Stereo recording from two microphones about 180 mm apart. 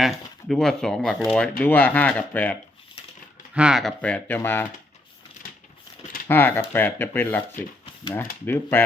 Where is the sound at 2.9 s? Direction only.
25° left (ahead or behind).